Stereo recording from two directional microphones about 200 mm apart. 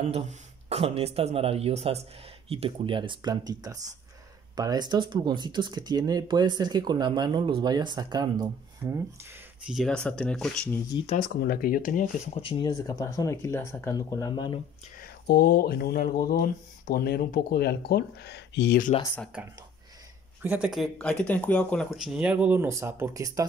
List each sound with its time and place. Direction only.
0.1 s speech: 30° right (ahead or behind)
9.7 s speech: centre (ahead or behind)
11.1 s speech: 45° left (ahead or behind)
12.4 s speech: 25° left (ahead or behind)
15.0 s speech: 50° left (ahead or behind)
19.3 s speech: 5° right (ahead or behind)